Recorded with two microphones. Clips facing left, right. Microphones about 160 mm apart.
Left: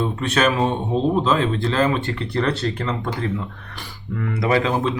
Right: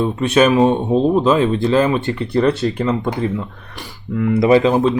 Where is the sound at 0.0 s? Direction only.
15° right (ahead or behind).